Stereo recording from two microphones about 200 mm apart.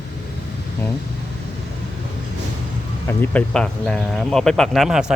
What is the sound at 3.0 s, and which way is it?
Speech, 10° left (ahead or behind).